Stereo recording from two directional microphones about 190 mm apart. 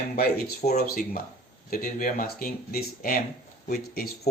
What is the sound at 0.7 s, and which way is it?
Speech, 50° left (ahead or behind).